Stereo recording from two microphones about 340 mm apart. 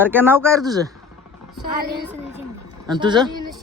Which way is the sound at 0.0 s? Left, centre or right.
Centre.